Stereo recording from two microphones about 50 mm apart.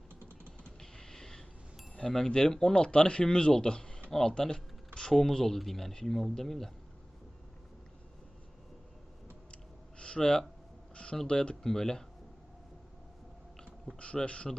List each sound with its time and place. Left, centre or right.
0.8 s a sound: centre
2.0 s speech: centre
10.0 s speech: centre
10.9 s a sound: left
11.2 s speech: centre
14.0 s a man's voice: left